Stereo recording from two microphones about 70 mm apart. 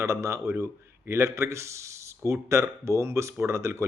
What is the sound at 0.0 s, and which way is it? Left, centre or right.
Speech, right.